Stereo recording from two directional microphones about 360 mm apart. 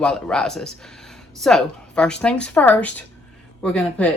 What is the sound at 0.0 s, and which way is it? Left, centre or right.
Speech, centre.